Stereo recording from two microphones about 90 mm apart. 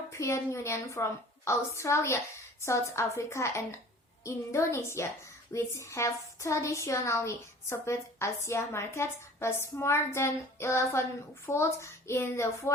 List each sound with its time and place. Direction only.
0.1 s a woman's voice: 30° left (ahead or behind)